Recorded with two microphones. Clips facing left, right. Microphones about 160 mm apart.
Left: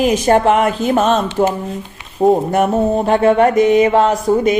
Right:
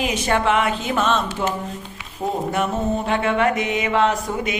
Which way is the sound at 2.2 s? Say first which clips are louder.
Left 10 dB; 45° left (ahead or behind).